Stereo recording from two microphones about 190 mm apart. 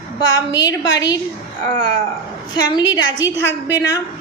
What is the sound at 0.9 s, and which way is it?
Speech, 20° left (ahead or behind).